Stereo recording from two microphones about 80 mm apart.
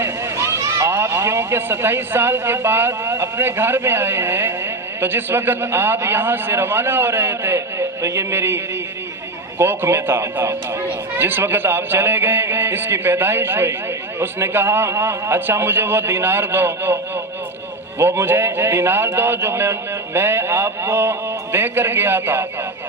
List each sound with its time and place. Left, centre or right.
0.0 s a man's voice: right
18.0 s a man's voice: right